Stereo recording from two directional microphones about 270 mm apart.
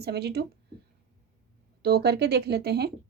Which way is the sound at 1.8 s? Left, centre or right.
Right.